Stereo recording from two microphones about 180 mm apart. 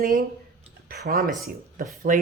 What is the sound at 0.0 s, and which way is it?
Speech, 50° right (ahead or behind).